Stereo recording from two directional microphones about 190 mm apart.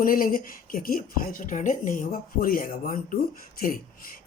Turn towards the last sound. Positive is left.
turn(degrees=50)  # may be behind; listen again after turning